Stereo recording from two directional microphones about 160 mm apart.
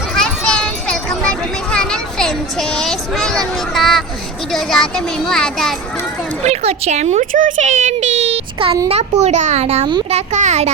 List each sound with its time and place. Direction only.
0.2 s a sound: 5° left (ahead or behind)
4.5 s a child's voice: centre (ahead or behind)
6.4 s a child's voice: 40° right (ahead or behind)